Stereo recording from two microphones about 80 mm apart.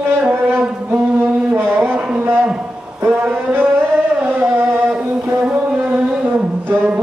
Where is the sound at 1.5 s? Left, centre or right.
Right.